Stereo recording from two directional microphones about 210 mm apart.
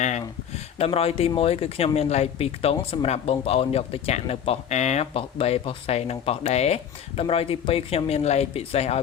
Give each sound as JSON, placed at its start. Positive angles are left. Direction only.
{"t": 0.0, "sound": "speech", "side_deg": 30}